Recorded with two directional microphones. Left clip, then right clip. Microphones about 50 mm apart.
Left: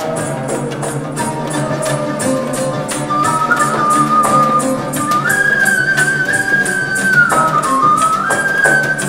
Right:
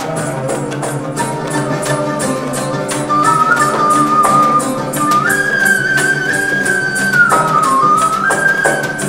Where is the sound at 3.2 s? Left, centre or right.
Centre.